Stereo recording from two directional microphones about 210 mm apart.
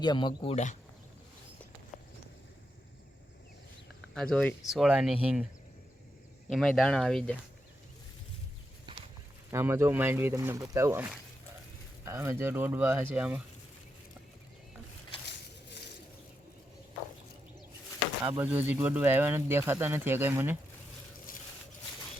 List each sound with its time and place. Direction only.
0.0 s speech: 20° left (ahead or behind)
0.5 s speech: 35° left (ahead or behind)
4.1 s speech: 5° left (ahead or behind)
6.5 s speech: centre (ahead or behind)
9.5 s speech: 10° right (ahead or behind)
18.3 s speech: 5° right (ahead or behind)